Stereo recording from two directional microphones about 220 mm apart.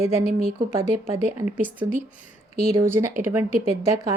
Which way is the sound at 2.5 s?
30° left (ahead or behind).